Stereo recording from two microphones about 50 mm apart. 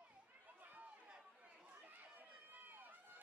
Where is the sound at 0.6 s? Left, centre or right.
Right.